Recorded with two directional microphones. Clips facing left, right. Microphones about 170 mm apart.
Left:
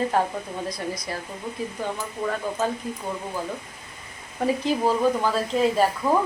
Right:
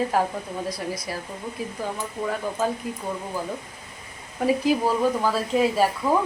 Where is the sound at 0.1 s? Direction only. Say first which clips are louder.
Even; 5° right (ahead or behind).